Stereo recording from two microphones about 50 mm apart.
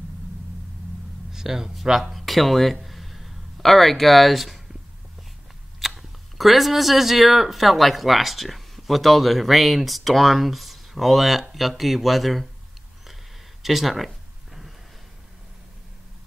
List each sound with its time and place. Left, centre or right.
1.3 s speech: centre
5.8 s speech: centre
13.6 s a sound: centre